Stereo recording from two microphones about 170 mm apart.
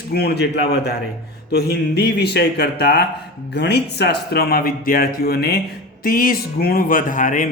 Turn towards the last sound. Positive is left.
turn(degrees=50)  # may be behind; listen again after turning